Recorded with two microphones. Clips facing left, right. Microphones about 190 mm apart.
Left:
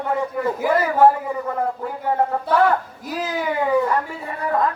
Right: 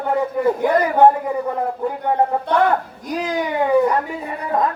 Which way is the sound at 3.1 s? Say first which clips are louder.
Right 3 dB; 5° left (ahead or behind).